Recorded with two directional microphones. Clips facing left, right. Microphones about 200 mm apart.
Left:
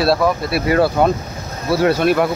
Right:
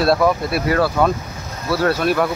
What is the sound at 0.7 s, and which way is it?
Speech, 25° left (ahead or behind).